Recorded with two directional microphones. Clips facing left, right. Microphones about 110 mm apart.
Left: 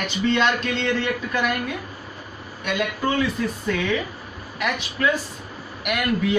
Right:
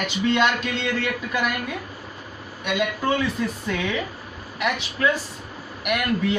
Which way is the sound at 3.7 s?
5° right (ahead or behind).